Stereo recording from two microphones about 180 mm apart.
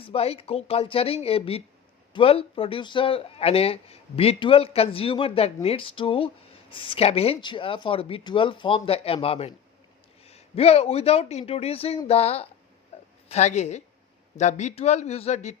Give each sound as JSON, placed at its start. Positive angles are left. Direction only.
{"t": 0.0, "sound": "speech", "side_deg": 35}
{"t": 12.9, "sound": "a sound", "side_deg": 35}
{"t": 13.2, "sound": "speech", "side_deg": 40}